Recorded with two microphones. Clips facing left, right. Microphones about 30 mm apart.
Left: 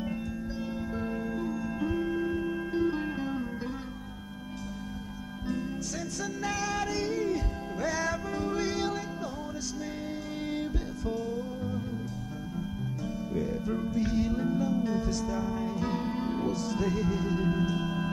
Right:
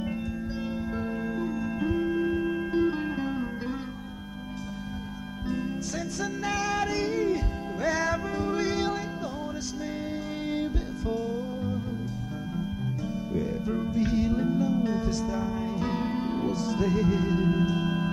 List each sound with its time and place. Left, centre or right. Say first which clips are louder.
1.2 s music: right 2 dB; centre
6.4 s music: right 3 dB; right
10.5 s music: right 4 dB; centre